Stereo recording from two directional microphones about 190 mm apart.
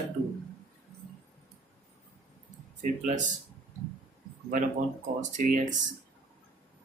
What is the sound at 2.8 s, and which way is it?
Speech, 40° right (ahead or behind).